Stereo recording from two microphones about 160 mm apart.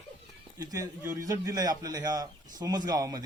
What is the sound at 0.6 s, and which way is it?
A man's voice, 20° right (ahead or behind).